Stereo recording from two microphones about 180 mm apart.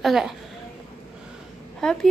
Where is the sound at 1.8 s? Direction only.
5° left (ahead or behind).